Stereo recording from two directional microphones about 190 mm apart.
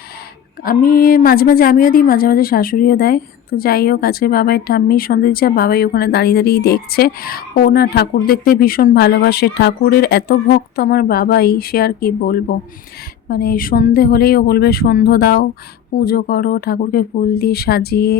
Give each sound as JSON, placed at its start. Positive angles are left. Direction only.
{"t": 0.6, "sound": "speech", "side_deg": 50}